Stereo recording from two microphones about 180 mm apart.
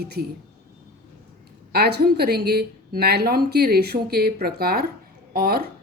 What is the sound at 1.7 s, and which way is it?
Speech, 60° right (ahead or behind).